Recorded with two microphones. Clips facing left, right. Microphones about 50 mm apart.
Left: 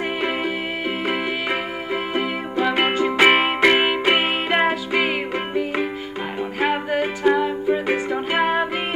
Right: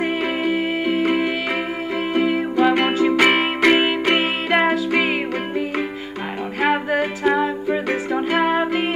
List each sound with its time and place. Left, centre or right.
0.2 s music: centre